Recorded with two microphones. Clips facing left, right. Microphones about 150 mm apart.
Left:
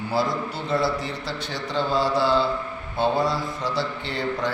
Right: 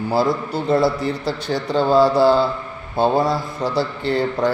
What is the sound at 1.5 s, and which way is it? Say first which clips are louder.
A man's voice: right 8 dB; 40° right (ahead or behind).